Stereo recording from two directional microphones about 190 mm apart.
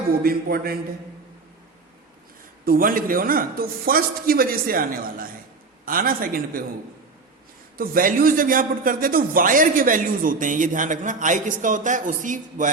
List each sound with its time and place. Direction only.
0.2 s a man's voice: 55° right (ahead or behind)
2.6 s a man's voice: 50° right (ahead or behind)
7.8 s a man's voice: 50° right (ahead or behind)